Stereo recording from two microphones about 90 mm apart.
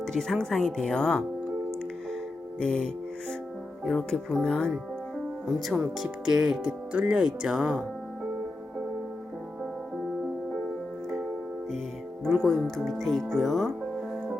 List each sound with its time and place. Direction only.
0.0 s speech: 5° left (ahead or behind)
2.6 s music: 10° left (ahead or behind)
3.8 s speech: 5° left (ahead or behind)
5.5 s speech: centre (ahead or behind)
12.2 s speech: 5° left (ahead or behind)